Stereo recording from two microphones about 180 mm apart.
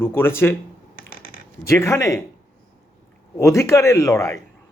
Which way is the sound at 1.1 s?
55° left (ahead or behind).